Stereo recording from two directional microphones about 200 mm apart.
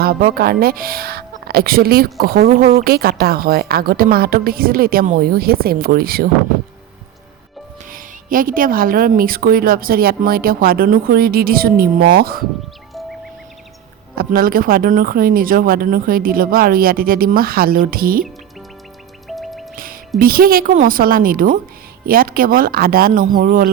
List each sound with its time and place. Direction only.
0.0 s speech: 50° right (ahead or behind)
7.9 s speech: 45° right (ahead or behind)
12.9 s music: centre (ahead or behind)
14.2 s speech: 45° right (ahead or behind)
19.4 s music: centre (ahead or behind)
19.7 s music: 45° right (ahead or behind)
20.1 s speech: 45° right (ahead or behind)